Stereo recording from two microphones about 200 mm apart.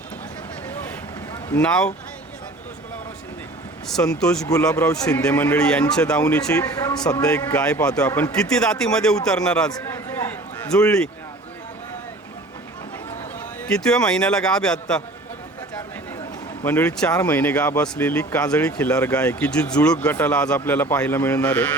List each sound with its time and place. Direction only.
1.6 s a man's voice: 5° left (ahead or behind)
3.8 s a man's voice: 5° left (ahead or behind)
6.5 s speech: 15° left (ahead or behind)
7.2 s a man's voice: 5° left (ahead or behind)
9.7 s a sound: 10° left (ahead or behind)
10.7 s a man's voice: 5° left (ahead or behind)
13.7 s a man's voice: 5° left (ahead or behind)
16.6 s speech: 10° left (ahead or behind)